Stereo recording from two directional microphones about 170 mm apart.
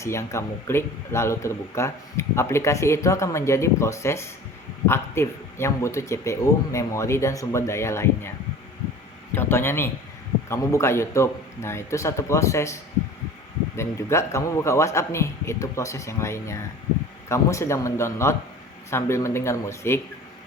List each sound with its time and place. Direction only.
0.0 s a man's voice: 15° left (ahead or behind)
9.3 s a man's voice: 15° left (ahead or behind)
13.7 s a man's voice: 15° left (ahead or behind)